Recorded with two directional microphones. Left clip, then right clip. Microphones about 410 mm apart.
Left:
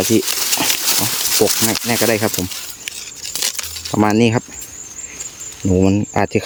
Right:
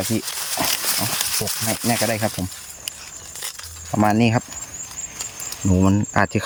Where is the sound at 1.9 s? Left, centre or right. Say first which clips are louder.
Left 4 dB; centre.